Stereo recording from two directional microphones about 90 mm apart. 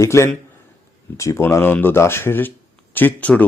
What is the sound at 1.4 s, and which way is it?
Speech, 25° left (ahead or behind).